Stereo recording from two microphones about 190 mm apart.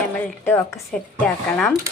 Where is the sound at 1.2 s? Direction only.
5° left (ahead or behind).